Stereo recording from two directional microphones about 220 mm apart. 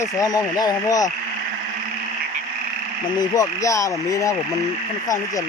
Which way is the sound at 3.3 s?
15° left (ahead or behind).